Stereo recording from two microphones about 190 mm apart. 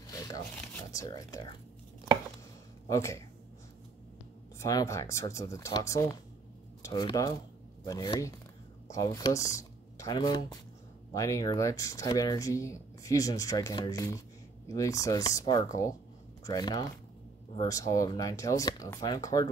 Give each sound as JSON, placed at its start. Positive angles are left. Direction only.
{"t": 0.0, "sound": "a sound", "side_deg": 20}
{"t": 2.9, "sound": "speech", "side_deg": 15}
{"t": 4.6, "sound": "speech", "side_deg": 15}